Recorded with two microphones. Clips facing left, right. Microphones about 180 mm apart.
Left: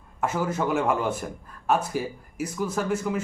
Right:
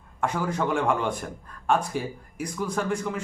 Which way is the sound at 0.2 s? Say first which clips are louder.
Left 1 dB; 5° left (ahead or behind).